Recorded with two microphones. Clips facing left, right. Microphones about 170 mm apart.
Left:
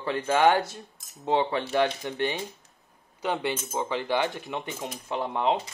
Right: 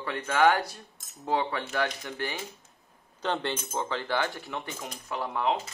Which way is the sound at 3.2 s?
10° left (ahead or behind).